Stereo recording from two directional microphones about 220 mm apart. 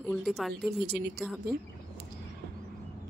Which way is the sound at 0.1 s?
Centre (ahead or behind).